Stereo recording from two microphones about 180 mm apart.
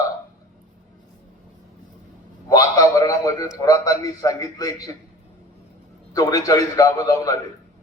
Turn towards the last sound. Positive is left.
turn(degrees=20)  # may be behind; listen again after turning